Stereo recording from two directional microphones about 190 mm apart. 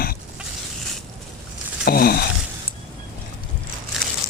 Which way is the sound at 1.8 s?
55° left (ahead or behind).